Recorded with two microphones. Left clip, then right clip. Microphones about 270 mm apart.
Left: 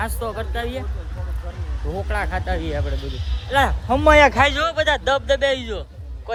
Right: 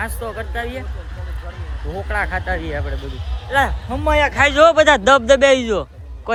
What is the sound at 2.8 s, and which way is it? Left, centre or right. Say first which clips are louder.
Speech: right 1 dB; right.